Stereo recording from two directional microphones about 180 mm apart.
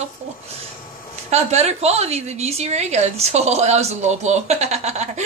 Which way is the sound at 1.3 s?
35° right (ahead or behind).